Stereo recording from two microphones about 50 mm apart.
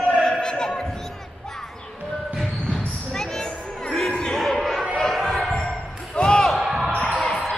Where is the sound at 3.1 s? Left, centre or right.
Centre.